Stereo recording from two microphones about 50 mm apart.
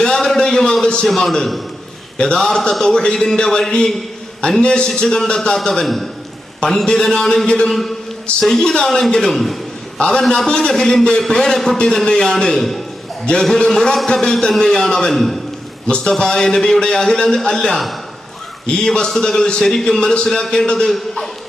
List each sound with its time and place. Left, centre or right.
0.0 s a sound: centre
1.0 s a man's voice: centre
2.1 s a man's voice: centre
7.7 s a man's voice: centre
15.9 s a man's voice: centre